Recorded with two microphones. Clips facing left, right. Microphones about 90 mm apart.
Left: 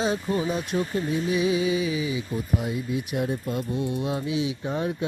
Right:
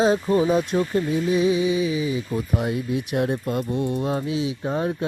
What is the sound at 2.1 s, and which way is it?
Speech, 50° right (ahead or behind).